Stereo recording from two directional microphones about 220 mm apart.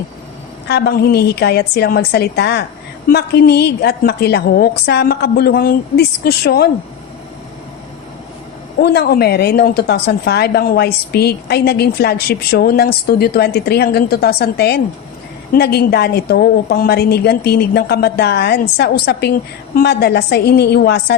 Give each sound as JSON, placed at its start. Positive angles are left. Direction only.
{"t": 0.7, "sound": "a woman's voice", "side_deg": 45}
{"t": 8.8, "sound": "a woman's voice", "side_deg": 45}